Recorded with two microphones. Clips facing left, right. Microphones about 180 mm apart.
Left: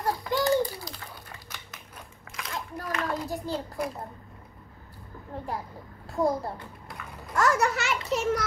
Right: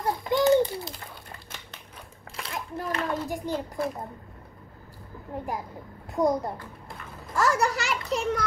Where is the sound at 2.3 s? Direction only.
30° right (ahead or behind).